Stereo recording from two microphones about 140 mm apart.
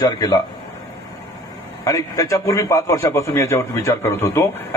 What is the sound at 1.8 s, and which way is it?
A man's voice, 25° left (ahead or behind).